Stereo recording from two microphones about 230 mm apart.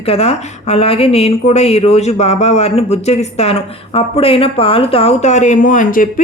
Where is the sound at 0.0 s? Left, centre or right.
Left.